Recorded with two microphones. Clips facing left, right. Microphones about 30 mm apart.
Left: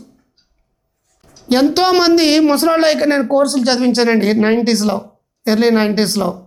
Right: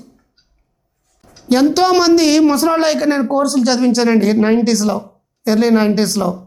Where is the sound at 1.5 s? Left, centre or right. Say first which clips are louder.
Even; left.